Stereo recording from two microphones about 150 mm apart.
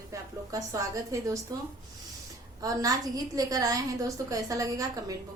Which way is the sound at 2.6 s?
25° right (ahead or behind).